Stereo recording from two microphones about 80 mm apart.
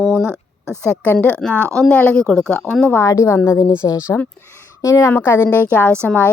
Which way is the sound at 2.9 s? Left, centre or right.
Left.